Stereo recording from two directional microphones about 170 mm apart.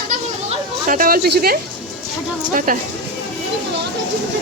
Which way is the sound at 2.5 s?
50° right (ahead or behind).